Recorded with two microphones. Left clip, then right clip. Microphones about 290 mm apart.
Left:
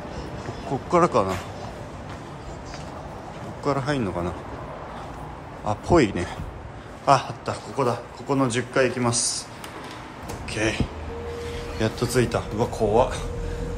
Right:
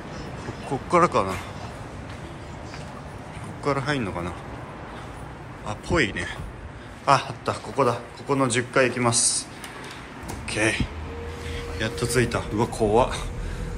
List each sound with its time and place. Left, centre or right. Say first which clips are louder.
0.7 s a man's voice: even; centre
3.6 s a man's voice: even; centre
5.7 s a man's voice: left 4 dB; centre
10.5 s a man's voice: right 2 dB; centre